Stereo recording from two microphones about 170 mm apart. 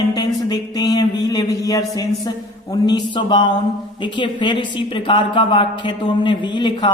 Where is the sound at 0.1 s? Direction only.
20° left (ahead or behind).